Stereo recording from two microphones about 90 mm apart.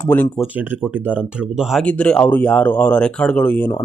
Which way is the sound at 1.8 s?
15° left (ahead or behind).